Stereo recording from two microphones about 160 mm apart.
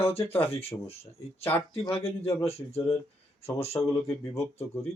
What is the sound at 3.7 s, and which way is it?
Speech, 15° left (ahead or behind).